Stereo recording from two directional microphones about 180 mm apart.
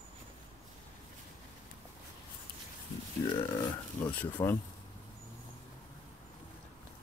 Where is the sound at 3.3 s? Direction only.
25° left (ahead or behind).